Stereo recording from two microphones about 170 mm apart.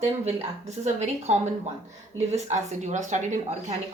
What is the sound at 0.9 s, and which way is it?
Speech, 40° right (ahead or behind).